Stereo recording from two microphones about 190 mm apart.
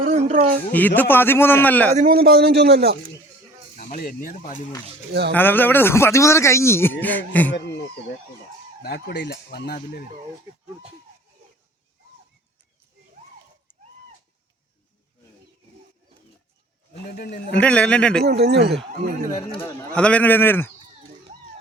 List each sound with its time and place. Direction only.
0.0 s a sound: 45° right (ahead or behind)
0.7 s a man's voice: 10° left (ahead or behind)
2.0 s a man's voice: 50° right (ahead or behind)
3.8 s speech: 45° left (ahead or behind)
5.3 s a man's voice: 10° left (ahead or behind)
8.8 s speech: 60° left (ahead or behind)
17.1 s speech: 55° left (ahead or behind)
17.5 s speech: 5° left (ahead or behind)
18.3 s a man's voice: 60° right (ahead or behind)
19.4 s a man's voice: 25° left (ahead or behind)
19.6 s a man's voice: 5° left (ahead or behind)